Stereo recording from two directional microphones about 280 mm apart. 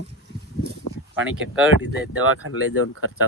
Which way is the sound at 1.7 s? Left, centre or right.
Right.